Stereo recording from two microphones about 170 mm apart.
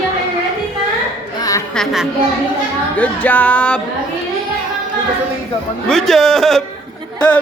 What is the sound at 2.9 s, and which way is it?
Speech, 10° left (ahead or behind).